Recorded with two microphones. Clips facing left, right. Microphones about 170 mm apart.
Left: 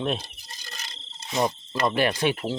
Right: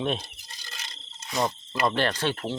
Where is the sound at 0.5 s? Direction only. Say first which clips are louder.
Left 3 dB; 40° left (ahead or behind).